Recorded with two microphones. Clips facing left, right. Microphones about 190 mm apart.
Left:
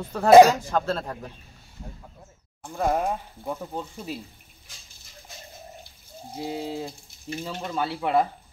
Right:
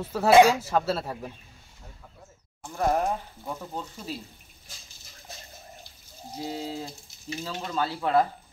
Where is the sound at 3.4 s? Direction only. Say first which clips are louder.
Left 4 dB; 55° left (ahead or behind).